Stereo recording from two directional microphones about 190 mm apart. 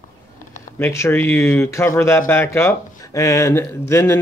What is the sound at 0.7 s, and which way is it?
Speech, 15° left (ahead or behind).